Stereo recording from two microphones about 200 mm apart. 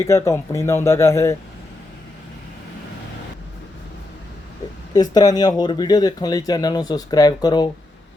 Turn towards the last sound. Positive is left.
turn(degrees=20)  # may be behind; listen again after turning